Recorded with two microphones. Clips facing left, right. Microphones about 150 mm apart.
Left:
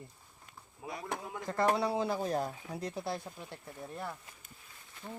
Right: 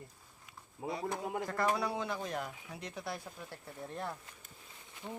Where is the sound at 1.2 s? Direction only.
50° right (ahead or behind).